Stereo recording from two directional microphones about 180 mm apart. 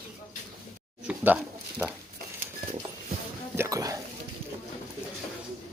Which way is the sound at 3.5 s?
15° right (ahead or behind).